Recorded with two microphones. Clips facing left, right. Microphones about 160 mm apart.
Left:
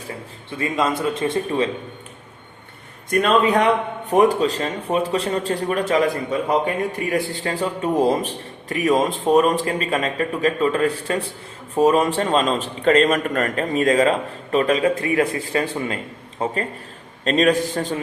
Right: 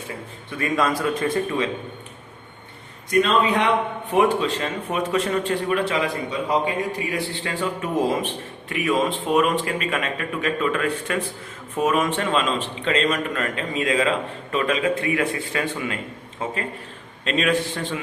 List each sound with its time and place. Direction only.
0.5 s a man's voice: 25° left (ahead or behind)
3.1 s a man's voice: 50° left (ahead or behind)
7.1 s a man's voice: 40° left (ahead or behind)